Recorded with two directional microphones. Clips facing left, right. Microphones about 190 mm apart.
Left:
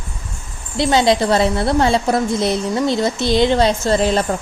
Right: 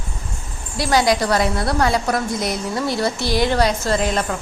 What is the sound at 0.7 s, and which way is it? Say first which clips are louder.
A woman's voice: left 3 dB; 25° left (ahead or behind).